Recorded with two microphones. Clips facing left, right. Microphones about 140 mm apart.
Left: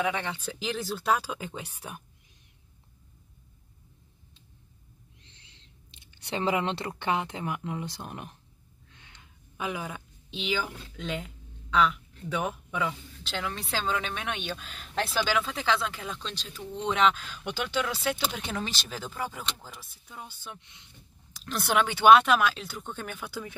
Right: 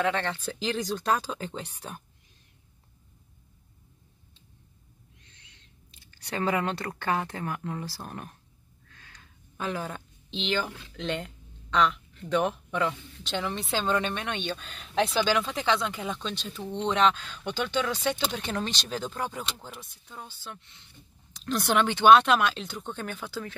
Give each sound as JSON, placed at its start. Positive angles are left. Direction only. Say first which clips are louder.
{"t": 0.0, "sound": "speech", "louder": "right 2 dB", "side_deg": 10}
{"t": 5.2, "sound": "speech", "louder": "left 1 dB", "side_deg": 30}
{"t": 8.8, "sound": "a sound", "louder": "right 1 dB", "side_deg": 20}
{"t": 11.0, "sound": "speech", "louder": "right 3 dB", "side_deg": 5}